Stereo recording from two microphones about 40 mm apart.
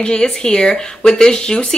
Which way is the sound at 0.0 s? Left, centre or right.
Left.